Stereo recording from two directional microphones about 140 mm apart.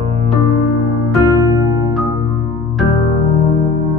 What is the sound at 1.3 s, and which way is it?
Music, 25° right (ahead or behind).